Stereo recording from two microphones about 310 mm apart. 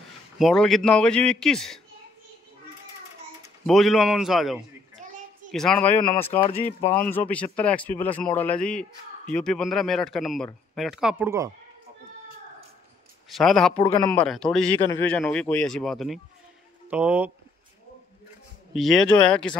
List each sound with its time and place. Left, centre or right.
0.4 s a man's voice: centre
3.6 s a man's voice: centre
5.0 s a sound: right
5.5 s a man's voice: centre
13.3 s a man's voice: centre
13.7 s a man's voice: centre
18.7 s a man's voice: centre